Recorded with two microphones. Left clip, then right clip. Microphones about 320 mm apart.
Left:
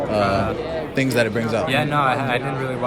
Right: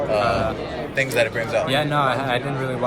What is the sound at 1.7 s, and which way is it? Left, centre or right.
Speech, centre.